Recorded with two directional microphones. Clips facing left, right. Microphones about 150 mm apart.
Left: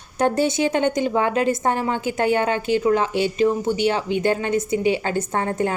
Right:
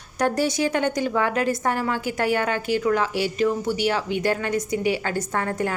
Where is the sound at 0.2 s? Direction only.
25° left (ahead or behind).